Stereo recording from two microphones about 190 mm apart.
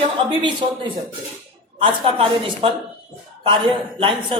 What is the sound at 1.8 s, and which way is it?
Speech, 30° right (ahead or behind).